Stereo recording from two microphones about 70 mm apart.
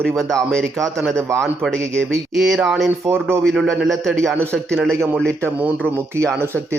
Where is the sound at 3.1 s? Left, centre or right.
Right.